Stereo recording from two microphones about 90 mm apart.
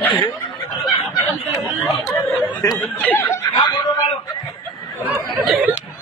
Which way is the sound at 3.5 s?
45° left (ahead or behind).